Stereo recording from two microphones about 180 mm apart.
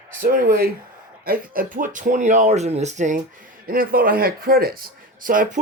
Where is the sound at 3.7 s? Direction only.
55° right (ahead or behind).